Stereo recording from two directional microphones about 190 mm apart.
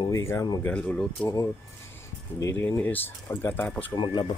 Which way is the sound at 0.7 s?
5° left (ahead or behind).